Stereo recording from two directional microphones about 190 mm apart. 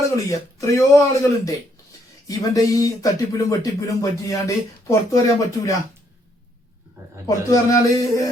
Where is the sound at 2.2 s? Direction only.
20° left (ahead or behind).